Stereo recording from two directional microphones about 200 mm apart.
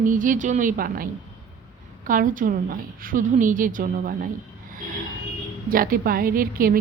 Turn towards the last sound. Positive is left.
turn(degrees=-45)  # may be behind; listen again after turning